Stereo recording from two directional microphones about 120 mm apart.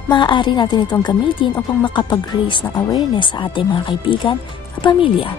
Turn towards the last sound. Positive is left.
turn(degrees=45)  # may be behind; listen again after turning